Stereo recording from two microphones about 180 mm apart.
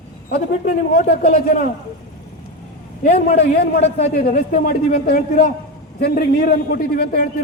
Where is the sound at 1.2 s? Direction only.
45° left (ahead or behind).